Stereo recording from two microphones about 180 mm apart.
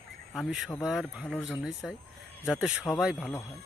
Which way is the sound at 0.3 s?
Centre (ahead or behind).